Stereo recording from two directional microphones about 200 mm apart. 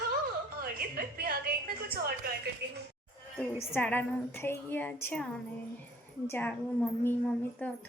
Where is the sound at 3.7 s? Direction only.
10° left (ahead or behind).